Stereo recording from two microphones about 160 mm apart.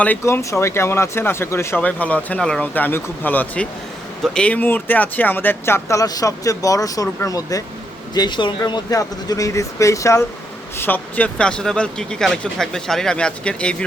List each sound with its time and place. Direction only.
0.0 s speech: 10° left (ahead or behind)